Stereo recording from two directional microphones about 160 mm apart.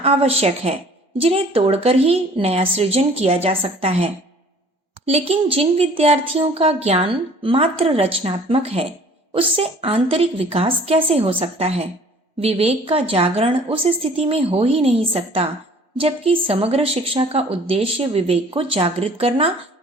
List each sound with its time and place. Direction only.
0.0 s speech: 40° right (ahead or behind)